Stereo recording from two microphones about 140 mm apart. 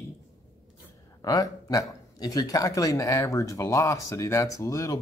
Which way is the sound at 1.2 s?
25° left (ahead or behind).